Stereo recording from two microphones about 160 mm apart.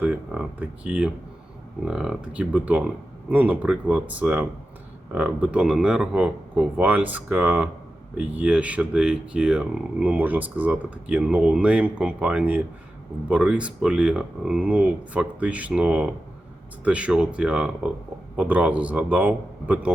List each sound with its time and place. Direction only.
0.0 s speech: 5° right (ahead or behind)